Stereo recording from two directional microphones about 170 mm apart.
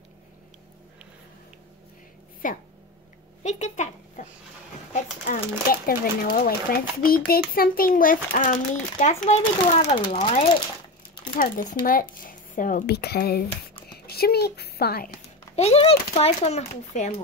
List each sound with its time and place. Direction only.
2.4 s speech: 50° left (ahead or behind)
5.3 s a sound: 60° left (ahead or behind); by 9.4 s 40° left (ahead or behind)
9.4 s speech: 40° left (ahead or behind)
11.3 s speech: 55° left (ahead or behind)
12.8 s a woman's voice: 70° left (ahead or behind)
15.5 s speech: 40° left (ahead or behind)